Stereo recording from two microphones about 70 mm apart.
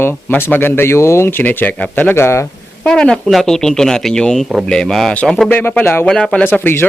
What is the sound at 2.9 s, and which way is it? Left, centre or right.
Speech, centre.